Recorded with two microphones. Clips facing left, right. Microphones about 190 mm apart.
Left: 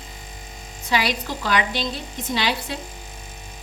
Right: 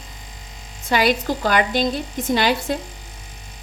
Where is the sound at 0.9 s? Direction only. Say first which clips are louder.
Right 5 dB; 50° right (ahead or behind).